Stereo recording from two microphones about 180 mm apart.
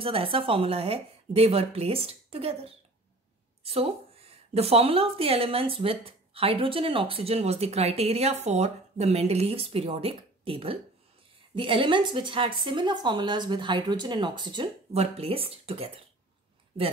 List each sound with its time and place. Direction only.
0.0 s a woman's voice: 30° right (ahead or behind)